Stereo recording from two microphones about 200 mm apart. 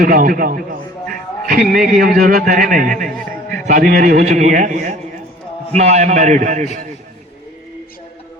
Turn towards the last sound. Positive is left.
turn(degrees=-40)  # may be behind; listen again after turning